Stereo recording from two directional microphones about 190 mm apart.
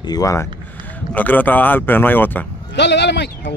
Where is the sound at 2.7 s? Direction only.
65° left (ahead or behind).